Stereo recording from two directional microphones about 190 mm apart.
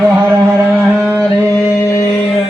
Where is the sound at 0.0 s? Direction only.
15° right (ahead or behind).